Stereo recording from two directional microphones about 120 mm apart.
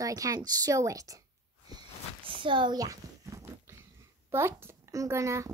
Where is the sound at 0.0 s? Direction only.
30° right (ahead or behind).